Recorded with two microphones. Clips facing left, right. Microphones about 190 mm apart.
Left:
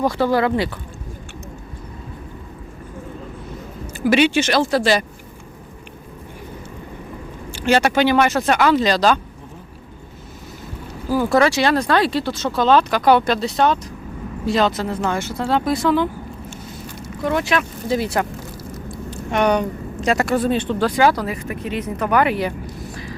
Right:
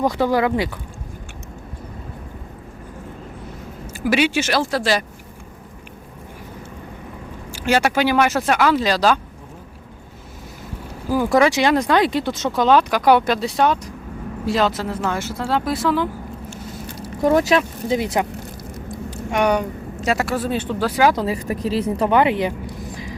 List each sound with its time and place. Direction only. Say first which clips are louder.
0.0 s speech: even; 15° right (ahead or behind)
3.9 s speech: left 3 dB; 5° right (ahead or behind)
7.5 s speech: left 2 dB; 10° right (ahead or behind)
11.1 s speech: even; 15° right (ahead or behind)
17.0 s a sound: right 5 dB; 40° right (ahead or behind)
17.6 s speech: even; 20° right (ahead or behind)
21.2 s speech: right 3 dB; 35° right (ahead or behind)